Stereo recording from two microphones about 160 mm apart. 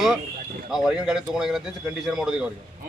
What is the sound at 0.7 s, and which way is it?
A man's voice, centre (ahead or behind).